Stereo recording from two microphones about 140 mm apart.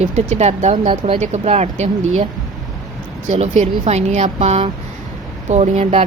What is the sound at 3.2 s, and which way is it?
Speech, 55° right (ahead or behind).